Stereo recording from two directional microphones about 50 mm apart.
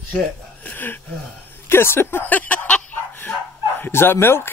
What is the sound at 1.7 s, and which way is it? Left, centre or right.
Speech, left.